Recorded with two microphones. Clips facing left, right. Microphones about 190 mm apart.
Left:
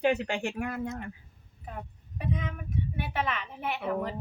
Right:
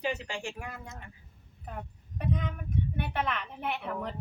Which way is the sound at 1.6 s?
Centre (ahead or behind).